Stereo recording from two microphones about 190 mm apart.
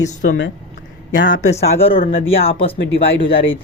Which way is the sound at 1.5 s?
35° left (ahead or behind).